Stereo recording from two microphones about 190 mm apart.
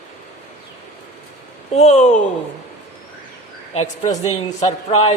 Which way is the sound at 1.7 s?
35° left (ahead or behind).